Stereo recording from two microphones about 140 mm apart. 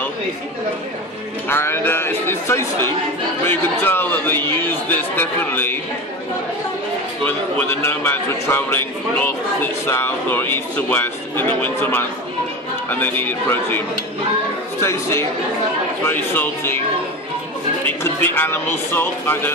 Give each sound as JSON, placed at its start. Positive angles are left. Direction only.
{"t": 1.5, "sound": "a man's voice", "side_deg": 15}
{"t": 7.3, "sound": "a man's voice", "side_deg": 15}
{"t": 17.8, "sound": "a man's voice", "side_deg": 15}